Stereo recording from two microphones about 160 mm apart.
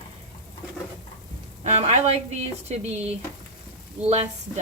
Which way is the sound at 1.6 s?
45° right (ahead or behind).